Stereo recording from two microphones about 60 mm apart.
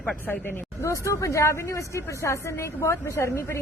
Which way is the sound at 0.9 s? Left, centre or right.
Left.